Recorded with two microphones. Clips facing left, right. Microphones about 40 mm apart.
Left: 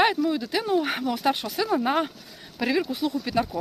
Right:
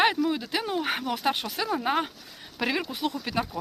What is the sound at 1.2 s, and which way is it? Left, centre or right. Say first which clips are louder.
Speech: left 4 dB; right.